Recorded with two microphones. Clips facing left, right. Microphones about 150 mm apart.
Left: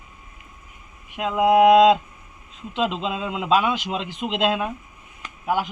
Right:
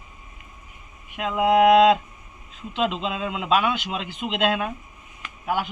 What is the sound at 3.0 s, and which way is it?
A man's voice, 15° left (ahead or behind).